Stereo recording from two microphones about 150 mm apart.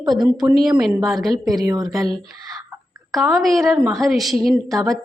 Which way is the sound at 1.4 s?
25° right (ahead or behind).